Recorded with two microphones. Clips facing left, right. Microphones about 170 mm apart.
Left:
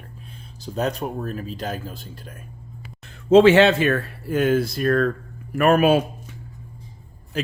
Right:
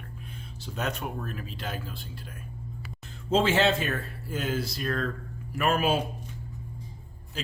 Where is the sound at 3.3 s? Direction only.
70° left (ahead or behind).